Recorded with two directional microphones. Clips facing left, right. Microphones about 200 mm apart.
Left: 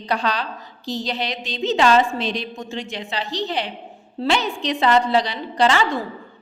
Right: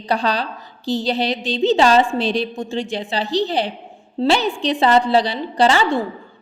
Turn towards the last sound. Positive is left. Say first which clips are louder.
# right 3 dB
turn(degrees=-30)  # may be behind; listen again after turning